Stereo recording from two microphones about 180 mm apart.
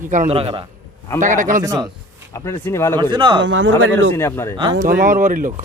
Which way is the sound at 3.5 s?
90° right.